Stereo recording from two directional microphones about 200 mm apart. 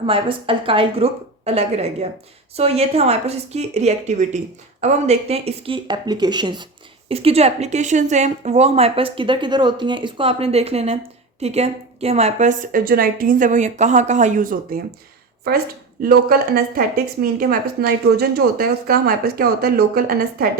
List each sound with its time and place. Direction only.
0.0 s a woman's voice: 25° right (ahead or behind); by 20.5 s 45° right (ahead or behind)